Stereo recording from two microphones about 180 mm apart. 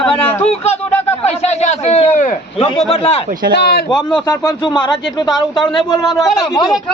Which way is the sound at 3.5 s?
65° left (ahead or behind).